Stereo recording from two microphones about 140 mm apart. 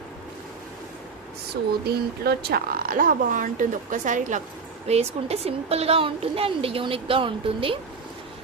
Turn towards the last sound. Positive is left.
turn(degrees=-40)  # may be behind; listen again after turning